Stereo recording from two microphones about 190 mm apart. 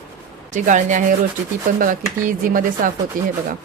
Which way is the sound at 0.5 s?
40° right (ahead or behind).